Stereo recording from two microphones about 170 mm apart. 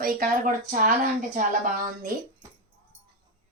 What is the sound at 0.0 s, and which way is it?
Speech, 55° right (ahead or behind).